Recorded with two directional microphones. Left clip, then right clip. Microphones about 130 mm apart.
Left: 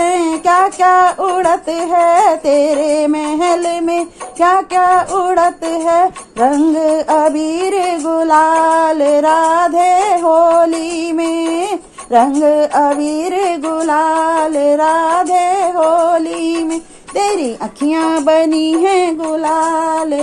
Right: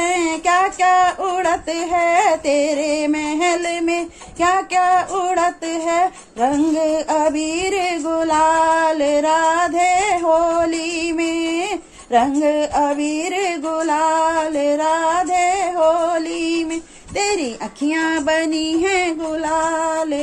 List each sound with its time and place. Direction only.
0.0 s female singing: 40° left (ahead or behind)
12.1 s female singing: 40° left (ahead or behind)
17.8 s female singing: 25° left (ahead or behind); by 20.0 s 50° left (ahead or behind)